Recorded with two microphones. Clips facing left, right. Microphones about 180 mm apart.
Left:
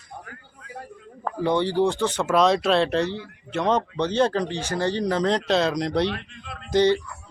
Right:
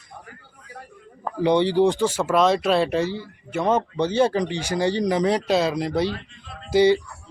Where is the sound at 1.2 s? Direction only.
15° right (ahead or behind).